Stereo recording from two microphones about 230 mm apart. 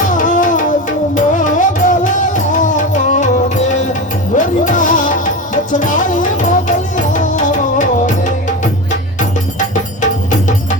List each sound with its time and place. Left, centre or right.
0.2 s music: left
4.4 s music: left